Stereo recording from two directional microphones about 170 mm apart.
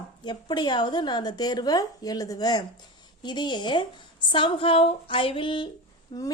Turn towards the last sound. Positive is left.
turn(degrees=20)  # may be behind; listen again after turning